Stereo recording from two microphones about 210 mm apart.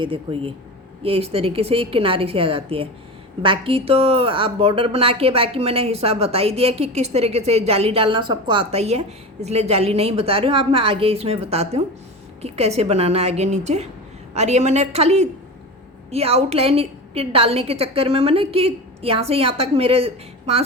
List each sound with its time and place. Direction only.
0.0 s a woman's voice: 25° right (ahead or behind)